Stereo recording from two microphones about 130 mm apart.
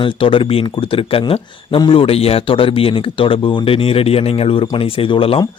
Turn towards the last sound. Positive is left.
turn(degrees=45)  # may be behind; listen again after turning